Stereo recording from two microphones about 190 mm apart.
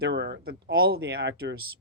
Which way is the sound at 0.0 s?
65° right (ahead or behind).